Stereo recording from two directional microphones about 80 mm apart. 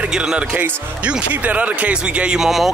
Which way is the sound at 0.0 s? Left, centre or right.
Centre.